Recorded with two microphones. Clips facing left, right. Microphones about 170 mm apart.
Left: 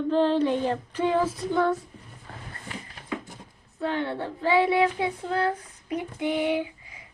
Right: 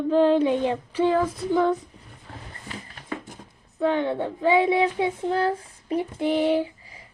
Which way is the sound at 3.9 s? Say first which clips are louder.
Right 4 dB; 20° right (ahead or behind).